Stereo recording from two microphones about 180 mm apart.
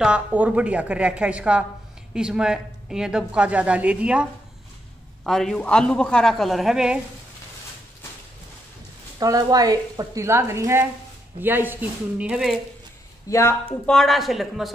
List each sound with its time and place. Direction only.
0.0 s a woman's voice: 5° right (ahead or behind)
9.2 s a woman's voice: 20° right (ahead or behind); by 12.5 s 5° right (ahead or behind)
13.3 s speech: 15° left (ahead or behind)
13.8 s speech: centre (ahead or behind)